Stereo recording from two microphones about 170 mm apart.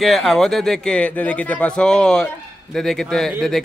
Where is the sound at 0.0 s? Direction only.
Centre (ahead or behind).